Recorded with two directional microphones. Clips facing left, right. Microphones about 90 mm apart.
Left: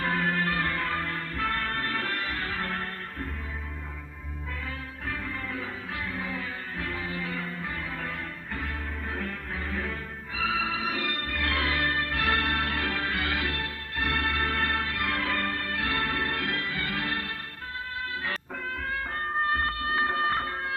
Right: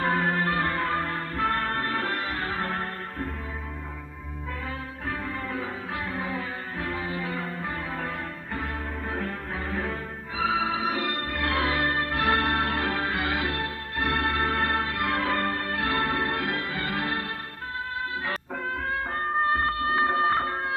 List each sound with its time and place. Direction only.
0.0 s music: 30° right (ahead or behind)
5.0 s music: 30° right (ahead or behind)
10.3 s music: 30° right (ahead or behind)